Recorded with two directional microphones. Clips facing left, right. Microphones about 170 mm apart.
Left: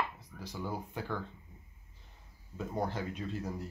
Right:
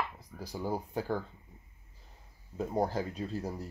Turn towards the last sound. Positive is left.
turn(degrees=-35)  # may be behind; listen again after turning